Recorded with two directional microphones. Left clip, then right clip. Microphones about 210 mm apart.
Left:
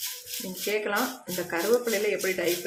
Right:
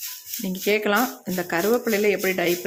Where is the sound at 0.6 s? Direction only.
45° right (ahead or behind).